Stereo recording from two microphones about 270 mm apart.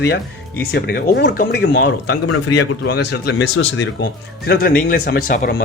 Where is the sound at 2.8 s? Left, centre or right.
Left.